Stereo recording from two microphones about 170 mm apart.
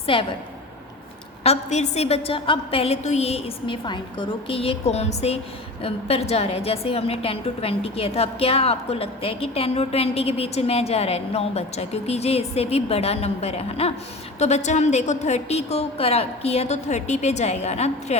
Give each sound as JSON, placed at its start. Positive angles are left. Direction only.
{"t": 0.0, "sound": "a woman's voice", "side_deg": 30}
{"t": 1.5, "sound": "a woman's voice", "side_deg": 40}